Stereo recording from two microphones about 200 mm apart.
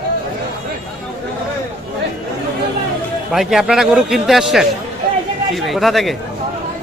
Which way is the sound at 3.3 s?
Centre (ahead or behind).